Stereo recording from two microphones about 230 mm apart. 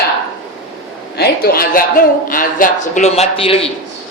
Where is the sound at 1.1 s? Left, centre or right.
Left.